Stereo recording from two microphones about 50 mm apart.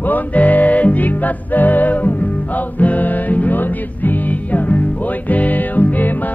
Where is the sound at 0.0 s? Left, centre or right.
Left.